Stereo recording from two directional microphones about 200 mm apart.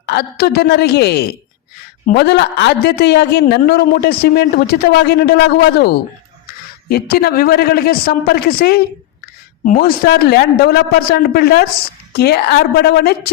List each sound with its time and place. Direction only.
0.0 s a man's voice: 55° left (ahead or behind)